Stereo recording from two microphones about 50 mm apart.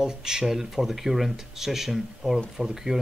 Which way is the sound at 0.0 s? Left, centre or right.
Centre.